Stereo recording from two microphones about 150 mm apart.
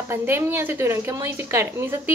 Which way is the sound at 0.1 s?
15° right (ahead or behind).